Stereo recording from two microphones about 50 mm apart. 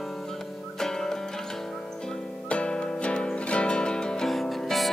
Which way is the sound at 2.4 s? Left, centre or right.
Left.